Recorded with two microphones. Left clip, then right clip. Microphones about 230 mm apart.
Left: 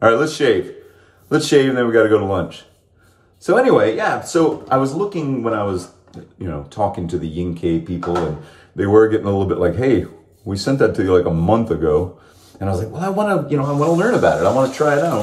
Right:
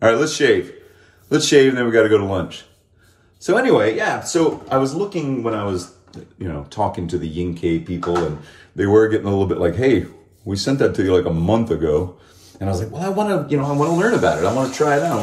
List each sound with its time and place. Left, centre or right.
0.0 s speech: centre